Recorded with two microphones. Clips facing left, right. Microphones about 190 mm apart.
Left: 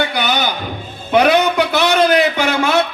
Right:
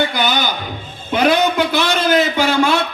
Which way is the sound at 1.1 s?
65° left (ahead or behind).